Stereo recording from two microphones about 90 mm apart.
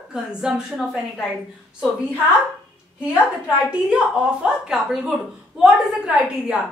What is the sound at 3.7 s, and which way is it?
A woman's voice, 10° right (ahead or behind).